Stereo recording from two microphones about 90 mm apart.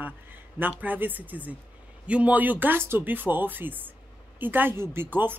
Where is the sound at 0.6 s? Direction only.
20° right (ahead or behind).